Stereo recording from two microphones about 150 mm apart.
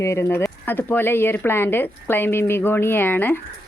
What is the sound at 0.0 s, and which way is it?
Speech, 20° left (ahead or behind).